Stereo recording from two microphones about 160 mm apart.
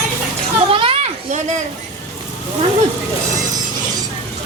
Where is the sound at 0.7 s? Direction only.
35° right (ahead or behind).